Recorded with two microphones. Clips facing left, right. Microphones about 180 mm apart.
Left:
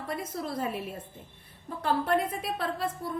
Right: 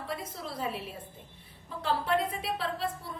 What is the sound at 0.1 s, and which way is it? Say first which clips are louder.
A woman's voice: left 6 dB; 50° left (ahead or behind).